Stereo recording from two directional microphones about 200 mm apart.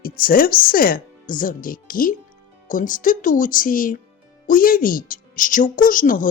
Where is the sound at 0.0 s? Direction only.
45° left (ahead or behind).